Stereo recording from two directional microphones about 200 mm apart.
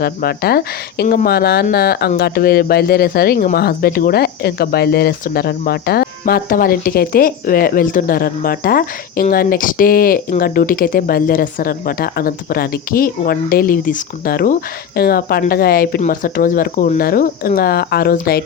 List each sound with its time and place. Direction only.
0.0 s speech: 50° left (ahead or behind)